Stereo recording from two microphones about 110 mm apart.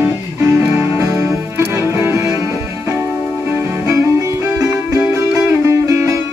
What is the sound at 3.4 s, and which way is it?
Music, 25° right (ahead or behind).